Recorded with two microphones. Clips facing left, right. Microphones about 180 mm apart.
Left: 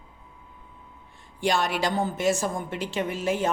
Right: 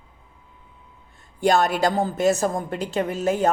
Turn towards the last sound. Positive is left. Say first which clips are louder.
# right 5 dB
turn(degrees=-40)  # may be behind; listen again after turning